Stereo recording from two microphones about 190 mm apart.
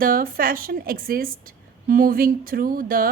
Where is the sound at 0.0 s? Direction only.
50° right (ahead or behind).